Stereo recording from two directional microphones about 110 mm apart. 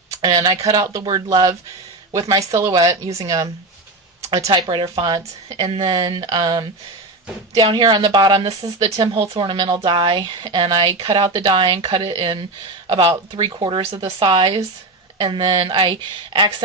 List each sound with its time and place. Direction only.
0.3 s speech: 35° right (ahead or behind)
1.0 s speech: 45° right (ahead or behind)
2.1 s speech: 30° right (ahead or behind)
4.5 s speech: 45° right (ahead or behind)